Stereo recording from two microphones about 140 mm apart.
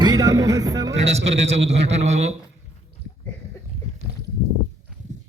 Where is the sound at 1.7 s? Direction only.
50° right (ahead or behind).